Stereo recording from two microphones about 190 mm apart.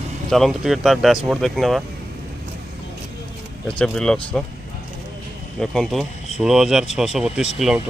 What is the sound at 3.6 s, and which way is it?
Speech, 5° left (ahead or behind).